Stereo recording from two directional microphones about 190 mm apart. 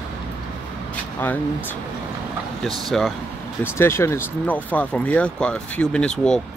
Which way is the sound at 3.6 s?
10° left (ahead or behind).